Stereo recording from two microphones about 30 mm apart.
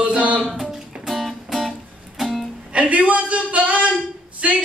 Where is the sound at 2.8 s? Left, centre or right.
Right.